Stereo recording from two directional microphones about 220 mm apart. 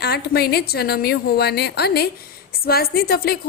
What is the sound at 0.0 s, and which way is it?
A woman's voice, 45° left (ahead or behind).